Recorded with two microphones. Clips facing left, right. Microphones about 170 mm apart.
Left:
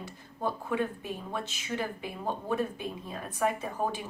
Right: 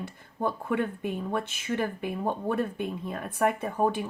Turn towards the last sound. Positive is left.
turn(degrees=-55)  # may be behind; listen again after turning